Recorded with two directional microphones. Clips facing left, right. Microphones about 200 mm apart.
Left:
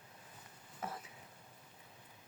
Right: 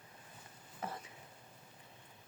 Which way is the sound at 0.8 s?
Centre (ahead or behind).